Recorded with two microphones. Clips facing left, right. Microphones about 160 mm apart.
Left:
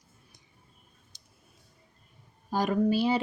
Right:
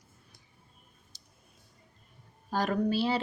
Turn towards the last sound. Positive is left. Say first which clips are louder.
# left 3 dB
turn(degrees=15)  # may be behind; listen again after turning